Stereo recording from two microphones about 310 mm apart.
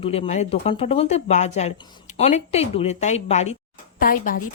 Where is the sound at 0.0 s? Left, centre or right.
Centre.